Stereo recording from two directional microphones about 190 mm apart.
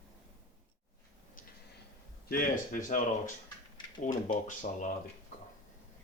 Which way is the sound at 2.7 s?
45° left (ahead or behind).